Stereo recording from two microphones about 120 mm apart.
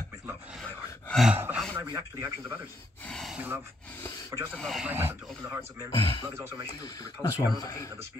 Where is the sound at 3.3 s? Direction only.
10° right (ahead or behind).